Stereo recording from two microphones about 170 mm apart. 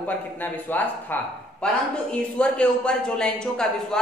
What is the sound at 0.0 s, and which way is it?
Speech, 10° left (ahead or behind).